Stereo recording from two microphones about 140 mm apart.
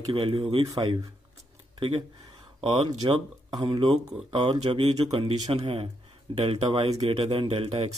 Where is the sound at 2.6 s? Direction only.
35° right (ahead or behind).